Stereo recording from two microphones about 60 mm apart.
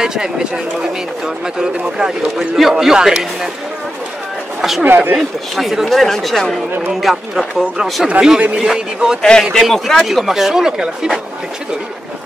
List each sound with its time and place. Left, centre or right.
0.0 s a man's voice: centre
4.6 s a sound: centre
4.8 s speech: right
5.6 s speech: centre
8.2 s a man's voice: centre
9.2 s a man's voice: centre